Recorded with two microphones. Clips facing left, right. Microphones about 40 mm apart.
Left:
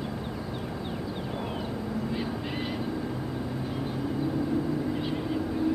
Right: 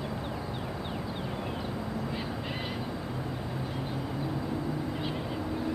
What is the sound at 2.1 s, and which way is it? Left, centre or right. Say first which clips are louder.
Owl: left 3 dB; centre.